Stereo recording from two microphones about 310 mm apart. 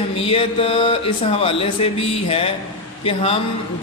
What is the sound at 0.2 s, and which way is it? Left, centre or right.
A man's voice, centre.